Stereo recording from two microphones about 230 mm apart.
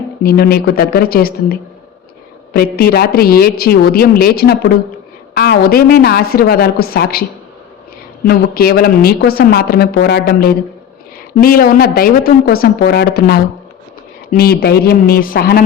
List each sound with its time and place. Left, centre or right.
0.2 s speech: left
2.7 s speech: left
8.3 s speech: left